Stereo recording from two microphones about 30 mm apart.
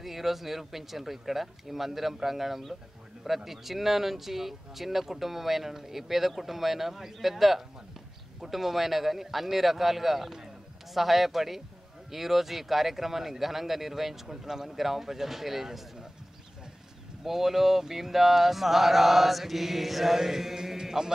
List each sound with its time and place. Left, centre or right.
0.0 s speech: centre
17.2 s speech: centre